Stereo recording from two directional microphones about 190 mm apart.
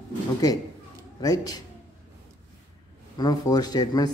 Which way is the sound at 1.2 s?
20° left (ahead or behind).